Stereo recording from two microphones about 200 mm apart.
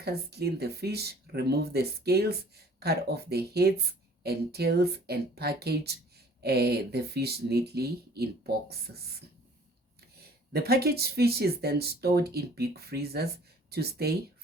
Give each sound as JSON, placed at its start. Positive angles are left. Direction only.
{"t": 0.0, "sound": "speech", "side_deg": -55}
{"t": 10.5, "sound": "speech", "side_deg": -50}